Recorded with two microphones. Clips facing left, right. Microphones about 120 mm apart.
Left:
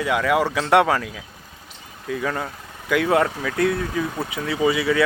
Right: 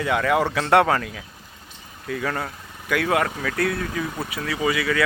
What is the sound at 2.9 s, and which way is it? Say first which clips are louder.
Speech: left 3 dB; 20° left (ahead or behind).